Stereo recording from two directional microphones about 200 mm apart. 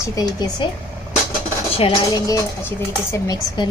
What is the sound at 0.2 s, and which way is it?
Speech, 20° left (ahead or behind).